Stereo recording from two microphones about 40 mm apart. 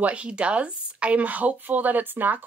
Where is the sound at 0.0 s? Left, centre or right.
Right.